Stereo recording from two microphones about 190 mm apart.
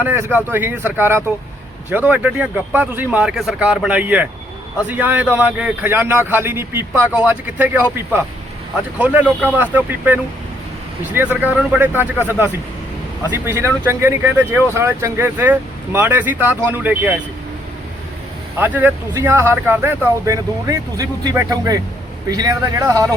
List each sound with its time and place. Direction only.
0.0 s speech: 10° right (ahead or behind)
9.0 s speech: 10° right (ahead or behind)
18.6 s speech: 10° right (ahead or behind)